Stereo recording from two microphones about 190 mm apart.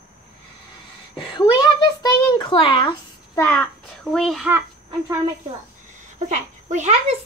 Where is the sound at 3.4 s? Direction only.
5° left (ahead or behind).